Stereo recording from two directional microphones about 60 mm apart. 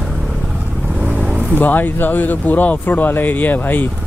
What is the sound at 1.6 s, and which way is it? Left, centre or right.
Speech, left.